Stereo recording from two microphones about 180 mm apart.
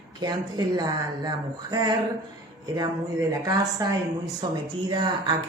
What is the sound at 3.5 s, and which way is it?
Speech, 20° right (ahead or behind).